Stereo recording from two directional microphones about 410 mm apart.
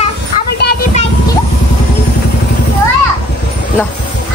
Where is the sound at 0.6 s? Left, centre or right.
Left.